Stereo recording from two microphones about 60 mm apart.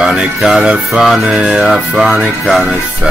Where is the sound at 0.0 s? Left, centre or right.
Centre.